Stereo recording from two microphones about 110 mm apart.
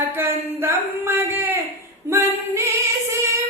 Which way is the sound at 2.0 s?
25° right (ahead or behind).